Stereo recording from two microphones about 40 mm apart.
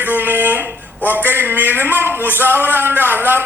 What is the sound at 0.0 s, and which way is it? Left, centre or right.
Speech, right.